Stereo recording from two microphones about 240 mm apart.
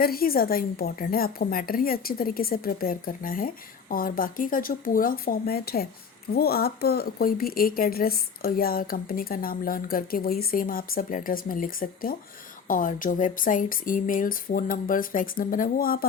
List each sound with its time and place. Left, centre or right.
0.0 s a woman's voice: left